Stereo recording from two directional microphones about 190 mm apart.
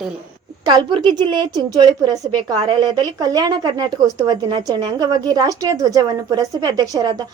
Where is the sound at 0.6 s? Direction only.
25° right (ahead or behind).